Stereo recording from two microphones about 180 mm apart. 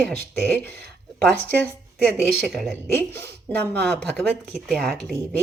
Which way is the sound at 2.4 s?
5° right (ahead or behind).